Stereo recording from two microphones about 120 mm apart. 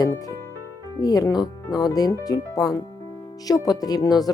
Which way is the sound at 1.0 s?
30° left (ahead or behind).